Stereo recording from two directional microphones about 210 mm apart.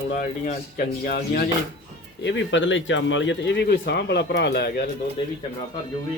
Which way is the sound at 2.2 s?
60° left (ahead or behind).